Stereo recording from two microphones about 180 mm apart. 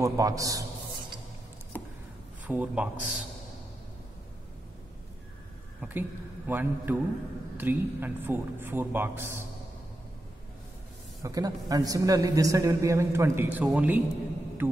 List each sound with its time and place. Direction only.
0.0 s a man's voice: 20° right (ahead or behind)
1.7 s a sound: 10° left (ahead or behind)
2.4 s a woman's voice: 10° right (ahead or behind)
5.8 s a man's voice: 10° right (ahead or behind)
11.2 s a woman's voice: 20° right (ahead or behind)